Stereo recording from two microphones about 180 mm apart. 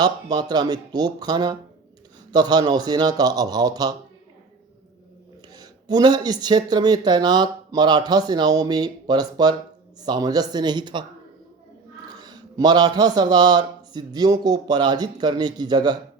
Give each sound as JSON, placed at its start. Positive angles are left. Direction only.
{"t": 0.0, "sound": "speech", "side_deg": -20}
{"t": 5.5, "sound": "speech", "side_deg": -20}
{"t": 12.0, "sound": "speech", "side_deg": -20}